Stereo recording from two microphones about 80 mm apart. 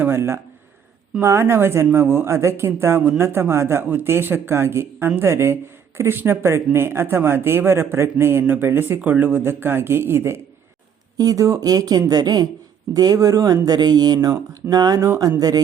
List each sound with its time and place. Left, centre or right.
0.0 s a sound: right
1.2 s speech: right
3.0 s speech: right
3.2 s speech: right
11.2 s speech: right
13.7 s speech: right